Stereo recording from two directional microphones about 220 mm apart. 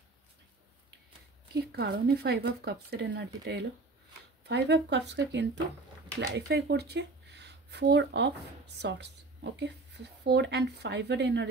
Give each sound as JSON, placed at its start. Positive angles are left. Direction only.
{"t": 1.5, "sound": "speech", "side_deg": -45}